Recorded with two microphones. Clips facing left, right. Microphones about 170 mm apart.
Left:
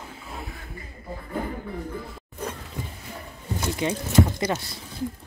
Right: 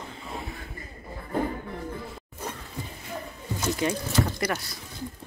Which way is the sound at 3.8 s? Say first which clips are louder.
Left 6 dB; 20° left (ahead or behind).